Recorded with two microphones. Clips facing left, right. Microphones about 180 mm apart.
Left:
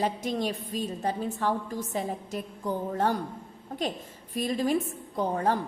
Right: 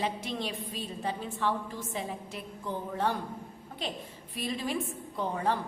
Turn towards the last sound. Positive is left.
turn(degrees=40)  # may be behind; listen again after turning